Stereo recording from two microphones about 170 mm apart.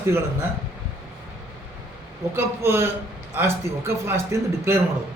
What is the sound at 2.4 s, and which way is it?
A man's voice, 15° right (ahead or behind).